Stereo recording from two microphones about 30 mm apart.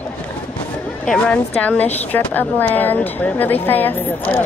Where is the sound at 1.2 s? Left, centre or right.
Left.